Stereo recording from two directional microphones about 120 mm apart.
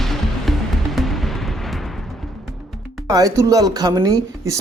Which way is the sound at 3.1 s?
30° right (ahead or behind).